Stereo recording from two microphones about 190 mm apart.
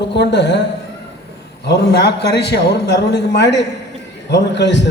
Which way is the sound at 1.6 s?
65° left (ahead or behind).